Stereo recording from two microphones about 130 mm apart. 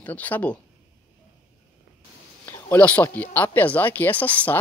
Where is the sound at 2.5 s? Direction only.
15° left (ahead or behind).